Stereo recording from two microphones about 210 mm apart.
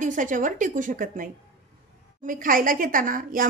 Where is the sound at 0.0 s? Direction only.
40° right (ahead or behind).